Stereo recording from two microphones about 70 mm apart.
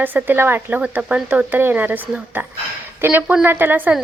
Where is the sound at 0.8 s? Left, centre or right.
Centre.